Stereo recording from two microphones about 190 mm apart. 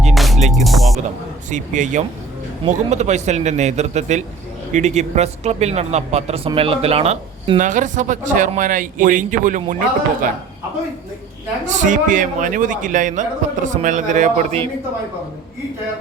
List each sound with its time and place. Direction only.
0.1 s music: centre (ahead or behind)
1.5 s a man's voice: 40° right (ahead or behind)
7.6 s a man's voice: 40° right (ahead or behind)
11.6 s a man's voice: 40° right (ahead or behind)